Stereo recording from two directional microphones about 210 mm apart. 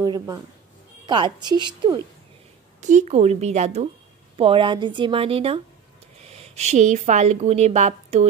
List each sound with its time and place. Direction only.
0.0 s speech: 20° right (ahead or behind)
2.8 s a woman's voice: 35° right (ahead or behind)